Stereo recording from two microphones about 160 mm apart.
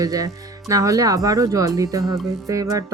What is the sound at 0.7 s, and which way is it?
A woman's voice, 20° right (ahead or behind).